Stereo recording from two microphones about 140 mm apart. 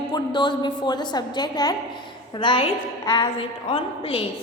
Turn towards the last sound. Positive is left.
turn(degrees=35)  # may be behind; listen again after turning